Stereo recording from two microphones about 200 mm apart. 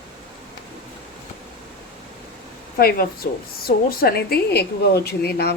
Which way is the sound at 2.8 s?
50° left (ahead or behind).